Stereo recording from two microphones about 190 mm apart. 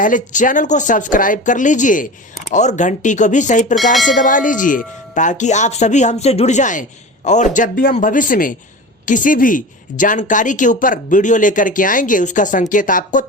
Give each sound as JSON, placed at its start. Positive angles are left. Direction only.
{"t": 0.0, "sound": "a woman's voice", "side_deg": 45}